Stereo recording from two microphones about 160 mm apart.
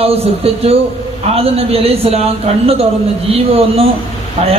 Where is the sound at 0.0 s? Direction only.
40° right (ahead or behind).